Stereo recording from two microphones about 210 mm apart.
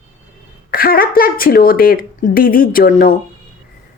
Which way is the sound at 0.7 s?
45° left (ahead or behind).